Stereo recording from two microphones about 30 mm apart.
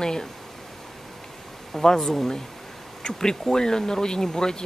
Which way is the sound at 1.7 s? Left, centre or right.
Centre.